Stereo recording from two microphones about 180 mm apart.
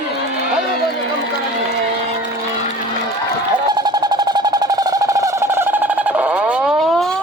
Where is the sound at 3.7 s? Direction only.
20° right (ahead or behind).